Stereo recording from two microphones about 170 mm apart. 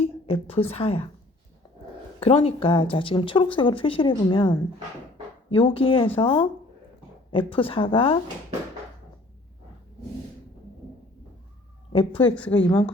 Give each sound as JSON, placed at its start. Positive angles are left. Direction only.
{"t": 0.0, "sound": "a woman's voice", "side_deg": 35}
{"t": 2.2, "sound": "speech", "side_deg": 35}
{"t": 11.9, "sound": "speech", "side_deg": 30}
{"t": 12.3, "sound": "speech", "side_deg": 10}